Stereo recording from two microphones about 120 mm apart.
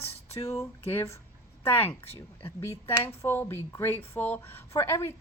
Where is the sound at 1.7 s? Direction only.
15° left (ahead or behind).